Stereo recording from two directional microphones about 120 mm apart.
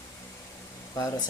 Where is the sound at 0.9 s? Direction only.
30° left (ahead or behind).